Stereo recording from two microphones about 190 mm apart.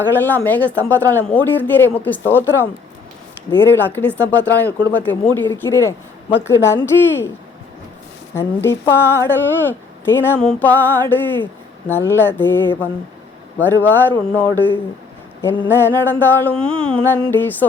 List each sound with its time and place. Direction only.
0.2 s speech: 10° left (ahead or behind)
3.7 s speech: 10° left (ahead or behind)
8.4 s speech: 15° left (ahead or behind)